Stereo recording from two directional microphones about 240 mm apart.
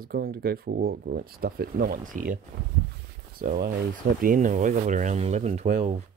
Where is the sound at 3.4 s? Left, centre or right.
Right.